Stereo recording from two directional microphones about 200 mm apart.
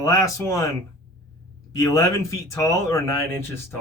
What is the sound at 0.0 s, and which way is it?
Speech, 15° left (ahead or behind).